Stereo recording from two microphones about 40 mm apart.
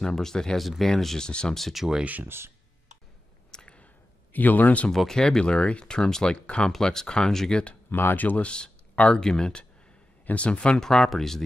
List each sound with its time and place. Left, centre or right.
0.0 s speech: centre
0.6 s speech: centre
1.2 s speech: left
1.8 s speech: centre
2.2 s speech: right
3.6 s a sound: left
4.3 s speech: left
4.9 s speech: centre
6.4 s speech: left
7.9 s speech: left
8.4 s speech: left
10.3 s speech: left
10.7 s speech: centre